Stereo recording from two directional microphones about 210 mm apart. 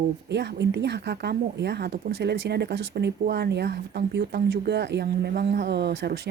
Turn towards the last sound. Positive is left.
turn(degrees=-55)  # may be behind; listen again after turning